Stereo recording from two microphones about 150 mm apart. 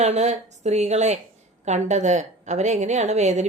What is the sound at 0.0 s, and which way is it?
Speech, 50° right (ahead or behind).